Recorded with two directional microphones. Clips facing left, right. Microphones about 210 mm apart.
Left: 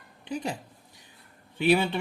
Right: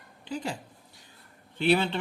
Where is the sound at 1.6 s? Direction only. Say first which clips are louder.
Left 1 dB; 10° left (ahead or behind).